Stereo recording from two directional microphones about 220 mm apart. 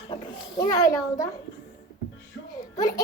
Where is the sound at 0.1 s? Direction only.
15° left (ahead or behind).